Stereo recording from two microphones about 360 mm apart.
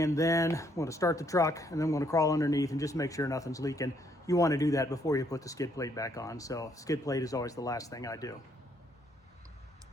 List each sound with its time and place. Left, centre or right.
0.0 s speech: centre